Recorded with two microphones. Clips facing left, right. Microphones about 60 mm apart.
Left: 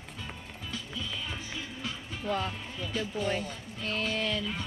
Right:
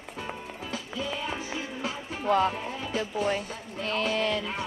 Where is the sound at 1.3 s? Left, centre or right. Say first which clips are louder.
Right 5 dB; centre.